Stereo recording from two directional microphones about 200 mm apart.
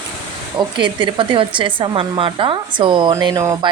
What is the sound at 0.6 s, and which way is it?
A woman's voice, 25° right (ahead or behind).